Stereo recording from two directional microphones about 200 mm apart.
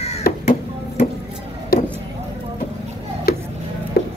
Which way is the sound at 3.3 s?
50° left (ahead or behind).